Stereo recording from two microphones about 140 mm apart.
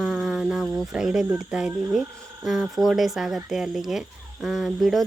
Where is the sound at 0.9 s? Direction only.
5° right (ahead or behind).